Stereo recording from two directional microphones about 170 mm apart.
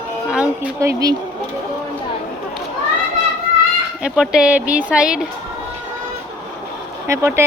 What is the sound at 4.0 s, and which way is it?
Speech, 5° right (ahead or behind).